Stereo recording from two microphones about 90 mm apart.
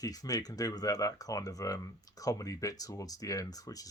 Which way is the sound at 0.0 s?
40° left (ahead or behind).